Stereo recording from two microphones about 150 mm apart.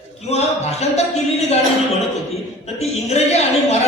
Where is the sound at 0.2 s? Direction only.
45° left (ahead or behind).